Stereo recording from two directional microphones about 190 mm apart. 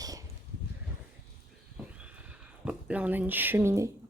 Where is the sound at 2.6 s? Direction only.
5° right (ahead or behind).